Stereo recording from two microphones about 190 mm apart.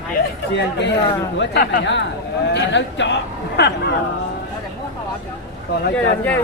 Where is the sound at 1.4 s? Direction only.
65° left (ahead or behind).